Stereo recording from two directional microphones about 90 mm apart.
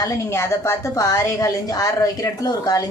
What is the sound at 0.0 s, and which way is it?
A woman's voice, 35° left (ahead or behind).